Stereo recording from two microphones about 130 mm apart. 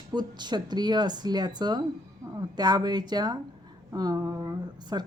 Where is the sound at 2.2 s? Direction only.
25° right (ahead or behind).